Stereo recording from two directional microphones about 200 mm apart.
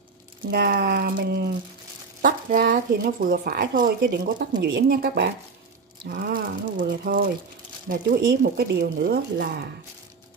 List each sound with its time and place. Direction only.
0.5 s speech: 50° right (ahead or behind)